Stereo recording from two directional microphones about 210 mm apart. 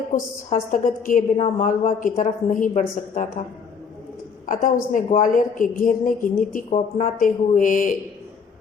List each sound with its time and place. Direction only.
0.1 s a woman's voice: 40° left (ahead or behind)
4.4 s a woman's voice: 40° left (ahead or behind)